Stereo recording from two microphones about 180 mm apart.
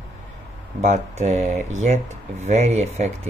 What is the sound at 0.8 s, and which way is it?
Speech, 40° right (ahead or behind).